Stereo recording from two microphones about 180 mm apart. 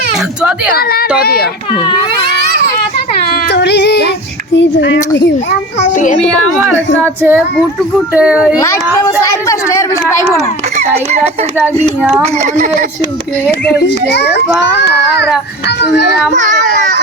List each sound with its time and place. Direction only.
0.7 s speech: 60° left (ahead or behind)
3.5 s a sound: 70° left (ahead or behind)
4.5 s speech: 80° left
7.0 s a child's voice: 10° right (ahead or behind)
8.6 s speech: 15° left (ahead or behind)
10.8 s a child's voice: 35° right (ahead or behind)
11.6 s a child's voice: 10° right (ahead or behind)
13.8 s a child's voice: 75° left (ahead or behind)